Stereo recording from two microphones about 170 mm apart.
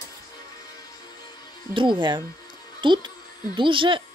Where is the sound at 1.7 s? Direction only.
30° right (ahead or behind).